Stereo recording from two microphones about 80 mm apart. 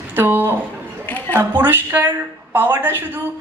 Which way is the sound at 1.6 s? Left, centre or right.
Right.